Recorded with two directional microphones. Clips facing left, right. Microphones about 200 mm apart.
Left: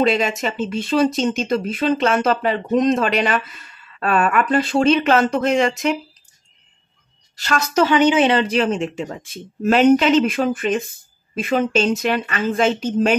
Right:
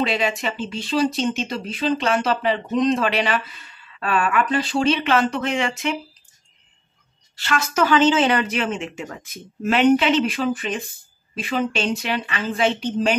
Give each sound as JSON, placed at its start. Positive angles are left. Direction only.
{"t": 0.0, "sound": "speech", "side_deg": 45}
{"t": 7.3, "sound": "speech", "side_deg": 40}
{"t": 7.8, "sound": "speech", "side_deg": 20}